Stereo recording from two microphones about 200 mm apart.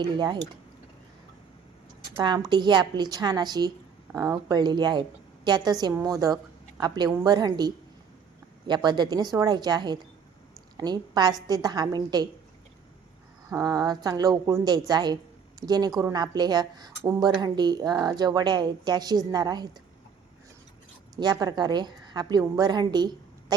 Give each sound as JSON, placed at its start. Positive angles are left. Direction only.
{"t": 0.0, "sound": "a woman's voice", "side_deg": -20}
{"t": 2.0, "sound": "a woman's voice", "side_deg": -20}
{"t": 13.5, "sound": "a woman's voice", "side_deg": -20}
{"t": 21.2, "sound": "a woman's voice", "side_deg": -20}